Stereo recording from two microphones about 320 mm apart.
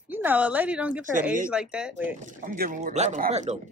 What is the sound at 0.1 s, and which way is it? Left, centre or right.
Speech, centre.